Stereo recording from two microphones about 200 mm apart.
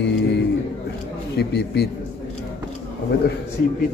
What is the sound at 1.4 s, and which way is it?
Speech, 55° left (ahead or behind).